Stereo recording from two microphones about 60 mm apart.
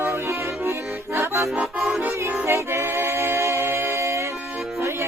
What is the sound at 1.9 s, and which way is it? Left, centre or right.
Music, right.